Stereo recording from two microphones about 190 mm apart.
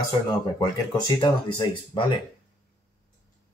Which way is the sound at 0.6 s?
20° left (ahead or behind).